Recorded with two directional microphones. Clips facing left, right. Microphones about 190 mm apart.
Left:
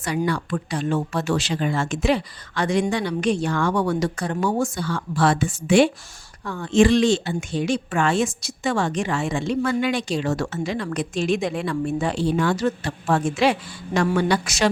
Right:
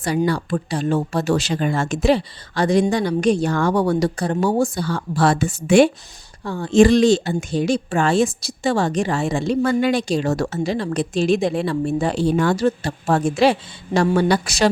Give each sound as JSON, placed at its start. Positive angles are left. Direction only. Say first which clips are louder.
{"t": 0.3, "sound": "speech", "louder": "right 3 dB", "side_deg": -35}
{"t": 6.4, "sound": "speech", "louder": "right 4 dB", "side_deg": -30}